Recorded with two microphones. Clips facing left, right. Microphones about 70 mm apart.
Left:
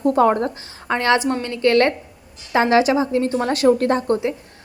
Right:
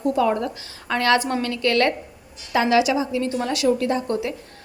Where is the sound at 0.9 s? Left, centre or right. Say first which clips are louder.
Left 1 dB; left.